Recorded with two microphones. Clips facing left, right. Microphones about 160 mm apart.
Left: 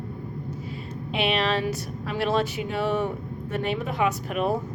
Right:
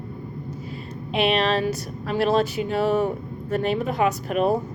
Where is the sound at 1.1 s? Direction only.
40° right (ahead or behind).